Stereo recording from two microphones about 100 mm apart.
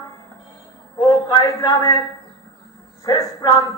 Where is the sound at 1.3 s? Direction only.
40° left (ahead or behind).